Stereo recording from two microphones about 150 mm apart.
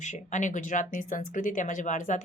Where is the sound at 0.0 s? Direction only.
55° left (ahead or behind).